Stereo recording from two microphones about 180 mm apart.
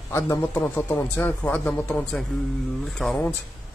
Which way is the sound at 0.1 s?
15° left (ahead or behind).